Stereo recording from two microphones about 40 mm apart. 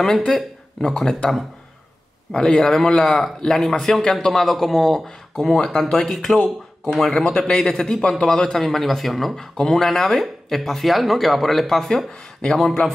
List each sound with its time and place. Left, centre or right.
0.0 s speech: centre
2.3 s speech: centre
7.2 s a man's voice: left; by 12.9 s centre